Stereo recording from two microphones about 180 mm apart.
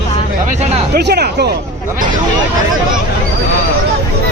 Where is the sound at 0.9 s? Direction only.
65° right (ahead or behind).